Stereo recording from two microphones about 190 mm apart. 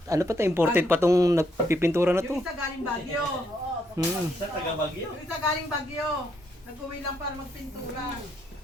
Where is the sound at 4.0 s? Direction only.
20° right (ahead or behind).